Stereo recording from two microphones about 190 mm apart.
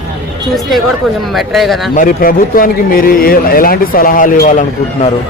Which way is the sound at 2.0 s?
50° left (ahead or behind).